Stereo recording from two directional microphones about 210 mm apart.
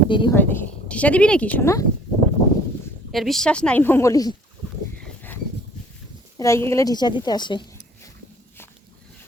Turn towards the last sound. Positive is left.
turn(degrees=20)  # may be behind; listen again after turning